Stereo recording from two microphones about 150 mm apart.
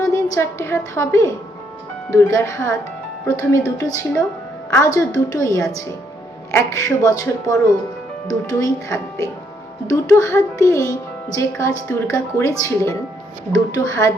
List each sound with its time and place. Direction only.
0.0 s a woman's voice: 20° left (ahead or behind)